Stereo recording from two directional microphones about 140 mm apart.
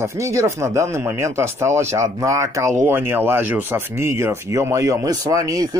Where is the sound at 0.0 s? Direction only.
20° right (ahead or behind).